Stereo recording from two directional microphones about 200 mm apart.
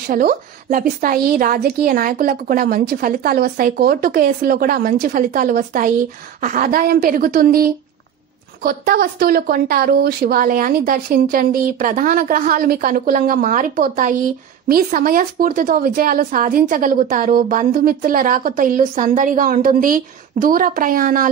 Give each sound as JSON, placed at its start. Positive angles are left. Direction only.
{"t": 0.1, "sound": "a woman's voice", "side_deg": -45}
{"t": 8.6, "sound": "a woman's voice", "side_deg": -45}